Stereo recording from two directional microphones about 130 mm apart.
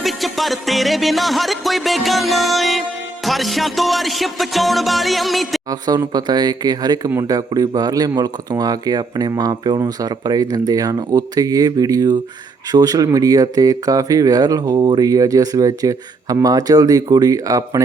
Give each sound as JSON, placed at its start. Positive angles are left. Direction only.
{"t": 0.0, "sound": "music", "side_deg": 0}
{"t": 6.1, "sound": "speech", "side_deg": -35}